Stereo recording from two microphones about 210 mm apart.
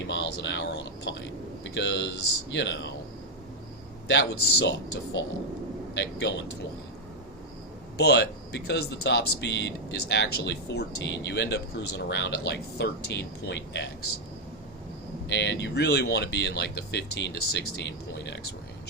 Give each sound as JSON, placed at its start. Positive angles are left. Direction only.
{"t": 0.1, "sound": "speech", "side_deg": 55}
{"t": 4.1, "sound": "speech", "side_deg": 55}
{"t": 6.0, "sound": "speech", "side_deg": 55}
{"t": 7.9, "sound": "speech", "side_deg": 50}
{"t": 15.3, "sound": "speech", "side_deg": 55}